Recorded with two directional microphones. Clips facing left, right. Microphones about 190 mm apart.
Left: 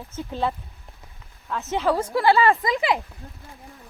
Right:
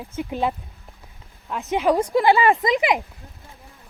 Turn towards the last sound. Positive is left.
turn(degrees=-15)  # may be behind; listen again after turning